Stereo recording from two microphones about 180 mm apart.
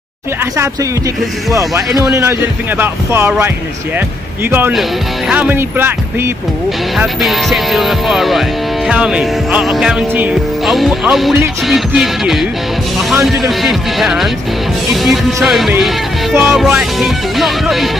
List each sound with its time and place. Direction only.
1.5 s speech: 15° right (ahead or behind)
7.0 s music: centre (ahead or behind)